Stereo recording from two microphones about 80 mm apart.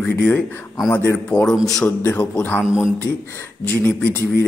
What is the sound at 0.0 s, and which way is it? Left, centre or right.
Speech, centre.